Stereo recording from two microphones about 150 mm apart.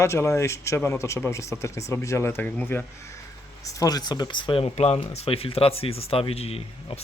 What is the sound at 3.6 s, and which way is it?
Speech, 25° left (ahead or behind).